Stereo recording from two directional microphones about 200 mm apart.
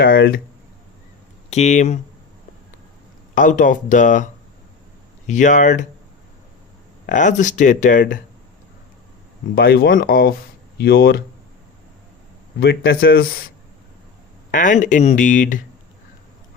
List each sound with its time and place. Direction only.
0.0 s speech: 50° left (ahead or behind)
1.5 s speech: 35° left (ahead or behind)
3.3 s speech: 40° left (ahead or behind)
7.1 s speech: 40° left (ahead or behind)
9.6 s speech: 50° left (ahead or behind)
12.5 s speech: 55° left (ahead or behind)
14.5 s speech: 40° left (ahead or behind)